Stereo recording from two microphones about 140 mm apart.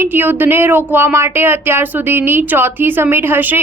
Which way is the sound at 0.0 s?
15° right (ahead or behind).